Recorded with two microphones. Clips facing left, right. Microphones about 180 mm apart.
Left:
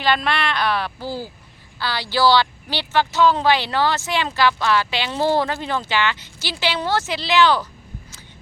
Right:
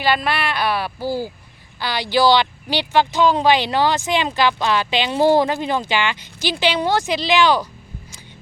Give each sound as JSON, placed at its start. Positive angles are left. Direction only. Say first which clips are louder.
{"t": 0.0, "sound": "speech", "louder": "right 1 dB", "side_deg": -5}